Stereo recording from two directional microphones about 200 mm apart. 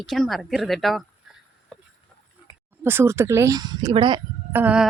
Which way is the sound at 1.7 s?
5° left (ahead or behind).